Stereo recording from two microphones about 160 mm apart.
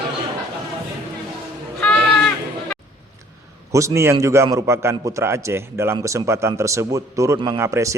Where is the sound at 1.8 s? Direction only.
5° left (ahead or behind).